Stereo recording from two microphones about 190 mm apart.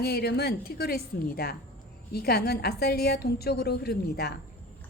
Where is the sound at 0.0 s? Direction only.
55° left (ahead or behind).